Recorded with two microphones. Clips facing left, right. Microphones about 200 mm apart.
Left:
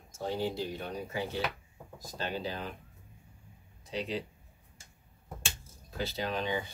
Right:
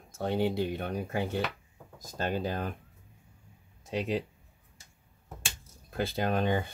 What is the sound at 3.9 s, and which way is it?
Speech, 50° right (ahead or behind).